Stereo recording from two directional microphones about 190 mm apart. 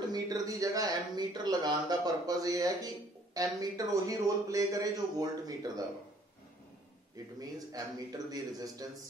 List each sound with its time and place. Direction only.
0.1 s speech: 20° right (ahead or behind)
7.3 s speech: 20° right (ahead or behind)